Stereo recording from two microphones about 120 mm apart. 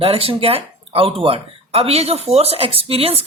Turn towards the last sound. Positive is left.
turn(degrees=-55)  # may be behind; listen again after turning